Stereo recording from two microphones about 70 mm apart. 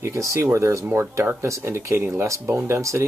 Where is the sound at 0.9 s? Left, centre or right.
Right.